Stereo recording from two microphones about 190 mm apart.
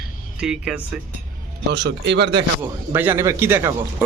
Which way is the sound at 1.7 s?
65° right (ahead or behind).